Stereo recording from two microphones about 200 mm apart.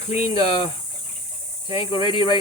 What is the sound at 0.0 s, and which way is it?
Speech, 35° left (ahead or behind).